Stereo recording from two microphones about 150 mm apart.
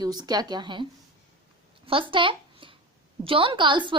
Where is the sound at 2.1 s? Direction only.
35° right (ahead or behind).